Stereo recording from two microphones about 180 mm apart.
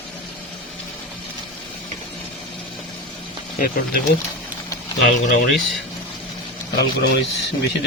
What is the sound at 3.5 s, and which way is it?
Speech, 55° left (ahead or behind).